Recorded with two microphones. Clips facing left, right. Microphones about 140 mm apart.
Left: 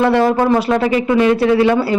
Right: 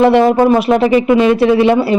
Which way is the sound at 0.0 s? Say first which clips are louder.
Right 4 dB; 20° right (ahead or behind).